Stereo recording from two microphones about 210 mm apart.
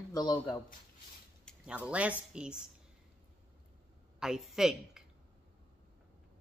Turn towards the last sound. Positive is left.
turn(degrees=0)  # may be behind; listen again after turning